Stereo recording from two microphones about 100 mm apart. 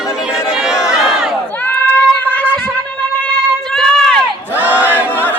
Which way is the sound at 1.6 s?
15° left (ahead or behind).